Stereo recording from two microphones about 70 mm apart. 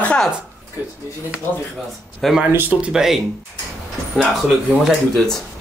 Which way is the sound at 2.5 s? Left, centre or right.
Right.